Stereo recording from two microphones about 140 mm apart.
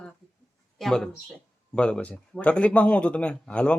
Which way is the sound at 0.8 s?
5° left (ahead or behind).